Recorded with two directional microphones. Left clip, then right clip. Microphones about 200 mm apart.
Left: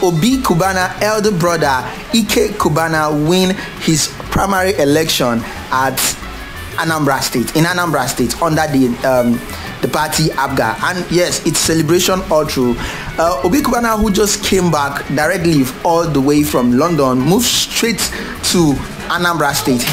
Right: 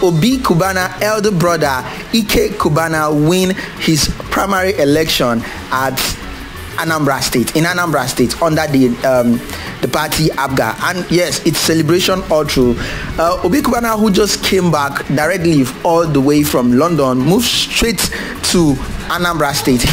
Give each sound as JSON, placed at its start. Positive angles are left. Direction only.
{"t": 0.0, "sound": "music", "side_deg": -10}
{"t": 9.8, "sound": "speech", "side_deg": -15}
{"t": 11.1, "sound": "music", "side_deg": -15}
{"t": 13.2, "sound": "music", "side_deg": -10}